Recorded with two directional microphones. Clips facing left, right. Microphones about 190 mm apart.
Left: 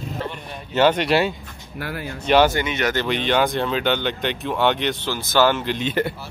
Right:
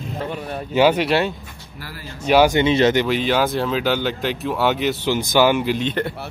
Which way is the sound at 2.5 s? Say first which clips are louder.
Right 7 dB; 25° right (ahead or behind).